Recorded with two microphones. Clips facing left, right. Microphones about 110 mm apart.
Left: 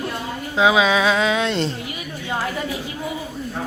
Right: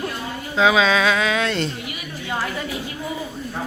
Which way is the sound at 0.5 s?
15° left (ahead or behind).